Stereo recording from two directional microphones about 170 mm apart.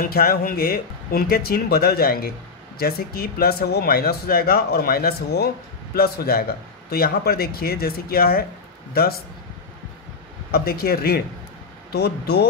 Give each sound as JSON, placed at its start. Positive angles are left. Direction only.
{"t": 0.0, "sound": "speech", "side_deg": 60}
{"t": 10.5, "sound": "speech", "side_deg": 65}